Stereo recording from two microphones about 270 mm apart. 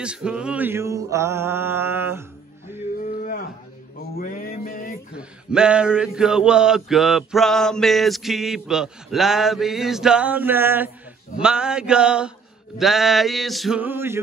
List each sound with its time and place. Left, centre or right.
0.0 s mantra: centre
3.0 s a sound: left
4.2 s mantra: left
5.1 s mantra: centre